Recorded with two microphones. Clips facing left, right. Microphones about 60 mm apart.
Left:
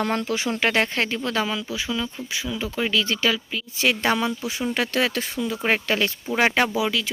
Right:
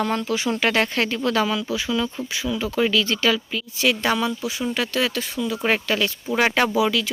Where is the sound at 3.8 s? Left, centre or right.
Left.